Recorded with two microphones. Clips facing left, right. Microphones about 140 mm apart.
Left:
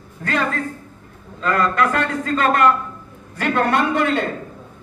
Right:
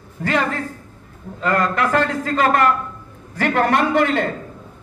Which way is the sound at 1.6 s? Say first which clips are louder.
Left 1 dB; 85° right.